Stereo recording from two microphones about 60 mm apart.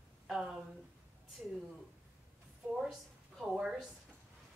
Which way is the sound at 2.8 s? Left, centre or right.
Centre.